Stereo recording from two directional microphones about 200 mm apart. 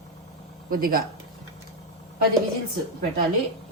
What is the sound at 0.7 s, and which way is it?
Speech, 45° right (ahead or behind).